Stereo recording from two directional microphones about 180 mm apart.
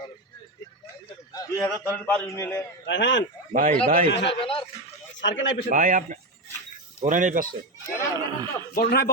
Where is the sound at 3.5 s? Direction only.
50° right (ahead or behind).